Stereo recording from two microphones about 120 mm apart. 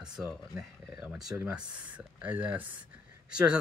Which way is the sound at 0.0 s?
5° right (ahead or behind).